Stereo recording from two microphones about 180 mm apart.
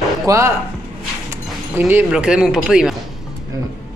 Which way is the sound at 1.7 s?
10° right (ahead or behind).